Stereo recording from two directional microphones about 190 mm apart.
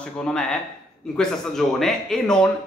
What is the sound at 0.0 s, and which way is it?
A man's voice, 5° left (ahead or behind).